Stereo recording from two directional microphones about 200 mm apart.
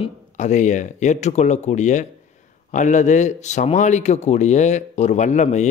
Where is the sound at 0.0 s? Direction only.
35° left (ahead or behind).